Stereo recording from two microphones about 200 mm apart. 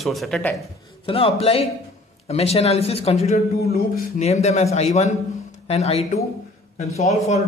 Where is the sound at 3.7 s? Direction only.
45° left (ahead or behind).